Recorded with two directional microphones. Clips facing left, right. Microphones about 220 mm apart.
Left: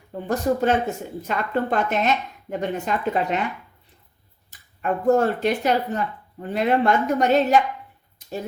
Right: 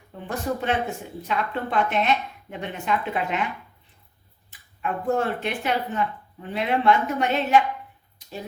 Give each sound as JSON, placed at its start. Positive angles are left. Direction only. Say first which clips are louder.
{"t": 0.3, "sound": "a woman's voice", "louder": "left 6 dB", "side_deg": 40}
{"t": 4.8, "sound": "speech", "louder": "left 6 dB", "side_deg": 40}